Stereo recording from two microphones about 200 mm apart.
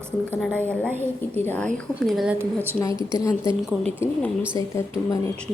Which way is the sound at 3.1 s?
15° left (ahead or behind).